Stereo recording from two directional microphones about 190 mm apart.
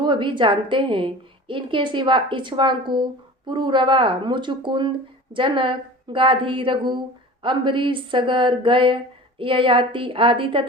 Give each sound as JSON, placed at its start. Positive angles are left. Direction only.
{"t": 0.0, "sound": "a woman's voice", "side_deg": -25}